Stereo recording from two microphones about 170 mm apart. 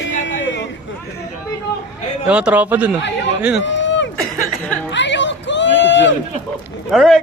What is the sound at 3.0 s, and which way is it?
Speech, 90° left.